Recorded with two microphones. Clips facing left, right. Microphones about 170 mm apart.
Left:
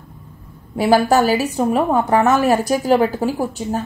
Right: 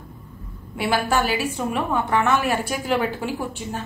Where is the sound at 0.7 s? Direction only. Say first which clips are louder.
Left 8 dB; 40° left (ahead or behind).